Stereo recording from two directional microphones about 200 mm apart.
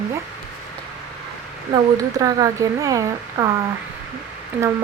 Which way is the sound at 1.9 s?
15° right (ahead or behind).